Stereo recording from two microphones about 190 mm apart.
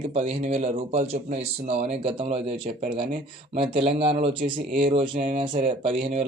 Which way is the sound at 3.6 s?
30° right (ahead or behind).